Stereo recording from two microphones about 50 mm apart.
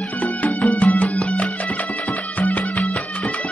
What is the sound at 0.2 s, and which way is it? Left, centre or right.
Music, left.